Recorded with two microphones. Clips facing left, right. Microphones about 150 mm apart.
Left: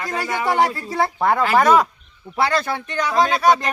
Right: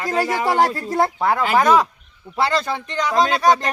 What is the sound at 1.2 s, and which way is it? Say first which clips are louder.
A man's voice: left 2 dB; 10° right (ahead or behind).